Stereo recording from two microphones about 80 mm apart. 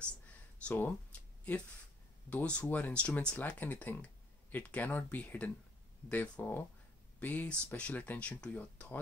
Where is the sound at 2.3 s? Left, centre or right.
Centre.